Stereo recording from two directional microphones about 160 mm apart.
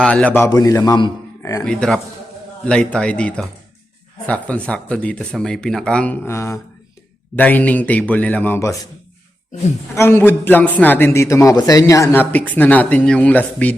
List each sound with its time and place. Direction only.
0.0 s a man's voice: 5° left (ahead or behind)
0.5 s a man's voice: 25° left (ahead or behind)
1.4 s music: 20° left (ahead or behind)
1.6 s a man's voice: 5° left (ahead or behind)
9.9 s a man's voice: 15° left (ahead or behind)